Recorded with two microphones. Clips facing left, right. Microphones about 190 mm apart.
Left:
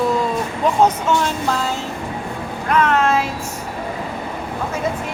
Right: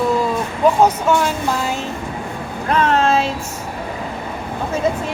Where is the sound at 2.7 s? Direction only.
30° right (ahead or behind).